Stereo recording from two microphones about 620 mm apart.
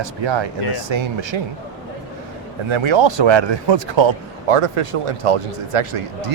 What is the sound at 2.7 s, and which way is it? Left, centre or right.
Speech, right.